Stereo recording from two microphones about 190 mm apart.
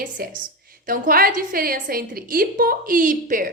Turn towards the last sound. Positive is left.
turn(degrees=-45)  # may be behind; listen again after turning